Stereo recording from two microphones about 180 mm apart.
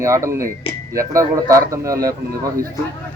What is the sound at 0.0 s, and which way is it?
A man's voice, 15° right (ahead or behind).